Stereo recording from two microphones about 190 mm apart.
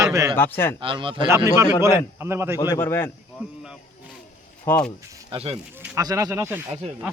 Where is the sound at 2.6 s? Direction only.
15° left (ahead or behind).